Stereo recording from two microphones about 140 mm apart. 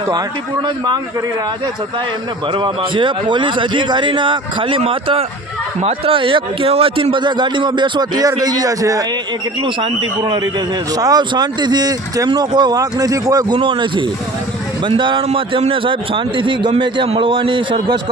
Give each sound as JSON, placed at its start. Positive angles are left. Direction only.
{"t": 2.5, "sound": "speech", "side_deg": -35}
{"t": 9.6, "sound": "speech", "side_deg": -35}
{"t": 13.6, "sound": "speech", "side_deg": -35}